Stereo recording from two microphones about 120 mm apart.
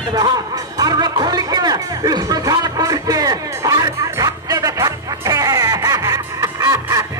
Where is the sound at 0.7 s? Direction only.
35° right (ahead or behind).